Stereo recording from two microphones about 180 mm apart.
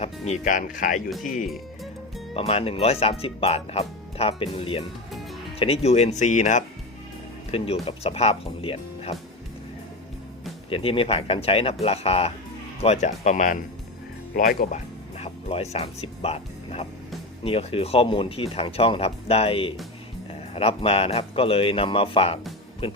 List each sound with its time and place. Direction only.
0.0 s speech: 40° left (ahead or behind)
1.5 s music: centre (ahead or behind)
2.3 s speech: 35° left (ahead or behind)
7.5 s speech: 30° left (ahead or behind)
10.7 s speech: 30° left (ahead or behind); by 14.8 s 50° left (ahead or behind)
15.2 s speech: 35° left (ahead or behind)